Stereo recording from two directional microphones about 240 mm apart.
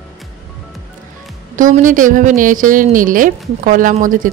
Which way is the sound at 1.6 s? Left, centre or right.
Right.